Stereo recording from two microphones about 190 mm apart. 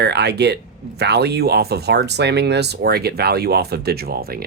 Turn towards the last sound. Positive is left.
turn(degrees=-55)  # may be behind; listen again after turning